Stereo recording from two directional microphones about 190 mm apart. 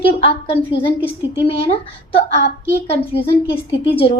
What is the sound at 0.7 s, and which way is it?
A woman's voice, 30° left (ahead or behind).